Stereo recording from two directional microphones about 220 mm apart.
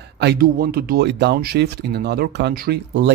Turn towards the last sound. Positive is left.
turn(degrees=-50)  # may be behind; listen again after turning